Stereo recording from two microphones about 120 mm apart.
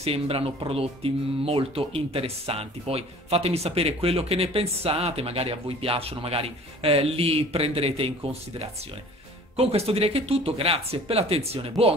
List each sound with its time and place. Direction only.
0.0 s speech: 55° right (ahead or behind)